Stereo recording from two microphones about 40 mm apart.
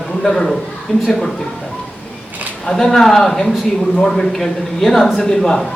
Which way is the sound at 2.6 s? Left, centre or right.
Centre.